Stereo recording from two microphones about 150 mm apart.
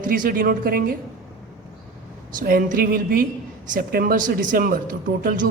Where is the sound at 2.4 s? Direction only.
70° right (ahead or behind).